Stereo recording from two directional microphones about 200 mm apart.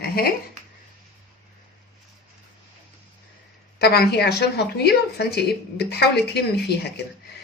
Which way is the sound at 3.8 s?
55° left (ahead or behind).